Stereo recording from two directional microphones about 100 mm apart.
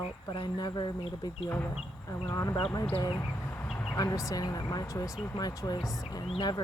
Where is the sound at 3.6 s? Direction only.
5° left (ahead or behind).